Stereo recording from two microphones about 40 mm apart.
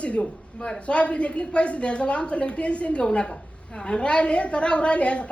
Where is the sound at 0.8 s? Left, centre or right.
Left.